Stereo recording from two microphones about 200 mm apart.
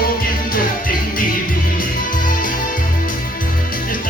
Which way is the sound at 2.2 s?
40° left (ahead or behind).